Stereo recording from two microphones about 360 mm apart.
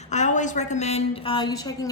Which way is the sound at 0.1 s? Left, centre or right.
Centre.